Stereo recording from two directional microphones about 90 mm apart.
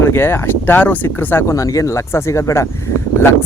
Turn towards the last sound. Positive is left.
turn(degrees=30)  # may be behind; listen again after turning